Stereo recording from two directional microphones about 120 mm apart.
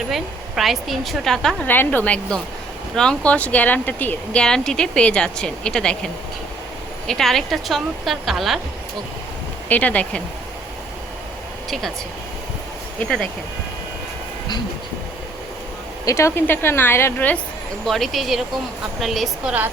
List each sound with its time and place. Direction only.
0.1 s a woman's voice: centre (ahead or behind)
7.1 s a woman's voice: 5° left (ahead or behind)
9.6 s speech: 10° left (ahead or behind)
13.0 s a woman's voice: 5° left (ahead or behind)
16.0 s a woman's voice: 25° left (ahead or behind)
17.8 s a woman's voice: centre (ahead or behind)